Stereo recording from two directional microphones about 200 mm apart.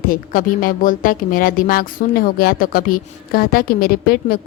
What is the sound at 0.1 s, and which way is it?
A woman's voice, 45° left (ahead or behind).